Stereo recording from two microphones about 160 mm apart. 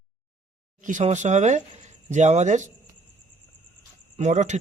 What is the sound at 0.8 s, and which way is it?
Speech, 50° right (ahead or behind).